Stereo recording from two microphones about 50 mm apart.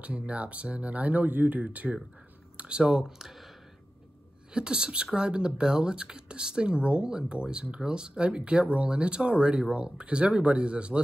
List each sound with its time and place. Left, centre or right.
0.0 s speech: right; by 3.4 s centre
4.6 s speech: centre